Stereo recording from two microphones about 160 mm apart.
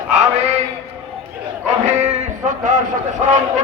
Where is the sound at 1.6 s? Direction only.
45° right (ahead or behind).